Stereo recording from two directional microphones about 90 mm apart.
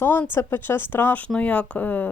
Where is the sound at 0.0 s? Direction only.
25° left (ahead or behind).